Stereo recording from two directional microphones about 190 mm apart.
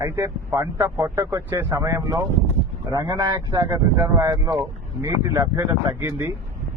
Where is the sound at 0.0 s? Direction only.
15° right (ahead or behind).